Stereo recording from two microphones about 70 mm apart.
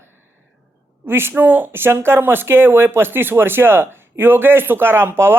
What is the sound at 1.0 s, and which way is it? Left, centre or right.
Speech, right.